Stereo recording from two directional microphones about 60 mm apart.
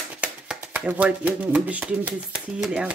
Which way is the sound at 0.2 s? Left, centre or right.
Centre.